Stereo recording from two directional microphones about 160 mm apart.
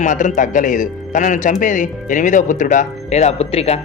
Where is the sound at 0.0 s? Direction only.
50° left (ahead or behind).